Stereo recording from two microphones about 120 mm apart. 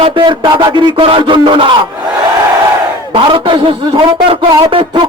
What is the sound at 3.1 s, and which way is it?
A man's voice, 45° right (ahead or behind).